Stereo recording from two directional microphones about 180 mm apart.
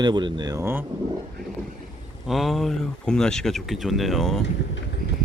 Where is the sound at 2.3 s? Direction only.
Centre (ahead or behind).